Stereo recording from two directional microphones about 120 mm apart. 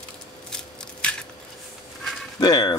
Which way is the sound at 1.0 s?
10° left (ahead or behind).